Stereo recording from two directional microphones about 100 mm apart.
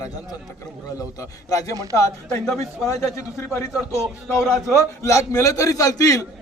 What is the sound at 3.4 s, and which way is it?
A man's voice, 25° left (ahead or behind).